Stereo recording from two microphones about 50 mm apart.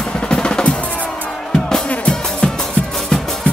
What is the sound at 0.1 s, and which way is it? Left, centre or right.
Drum, centre.